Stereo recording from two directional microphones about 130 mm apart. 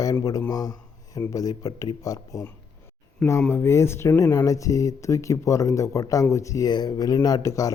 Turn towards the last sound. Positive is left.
turn(degrees=25)  # may be behind; listen again after turning